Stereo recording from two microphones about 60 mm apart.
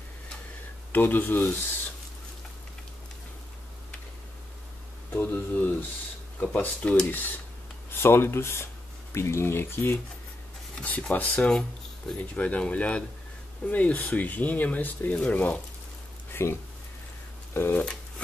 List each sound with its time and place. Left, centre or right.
0.9 s speech: left
5.1 s speech: left
7.9 s speech: left
10.8 s speech: left
16.3 s speech: left
17.6 s speech: left